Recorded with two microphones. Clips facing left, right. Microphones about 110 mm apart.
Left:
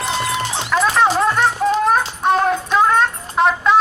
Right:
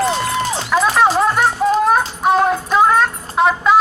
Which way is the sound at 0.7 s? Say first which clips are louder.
Right 1 dB; 5° right (ahead or behind).